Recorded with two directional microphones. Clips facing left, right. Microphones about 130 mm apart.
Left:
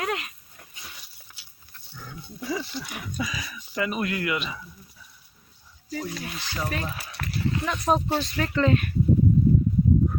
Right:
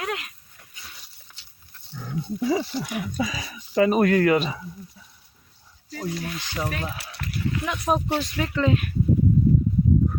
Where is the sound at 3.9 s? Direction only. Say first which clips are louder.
Right 9 dB; 45° right (ahead or behind); by 5.1 s 25° right (ahead or behind).